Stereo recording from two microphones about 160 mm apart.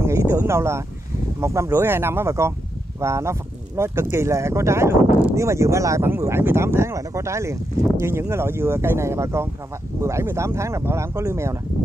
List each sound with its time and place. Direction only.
0.0 s speech: 15° right (ahead or behind)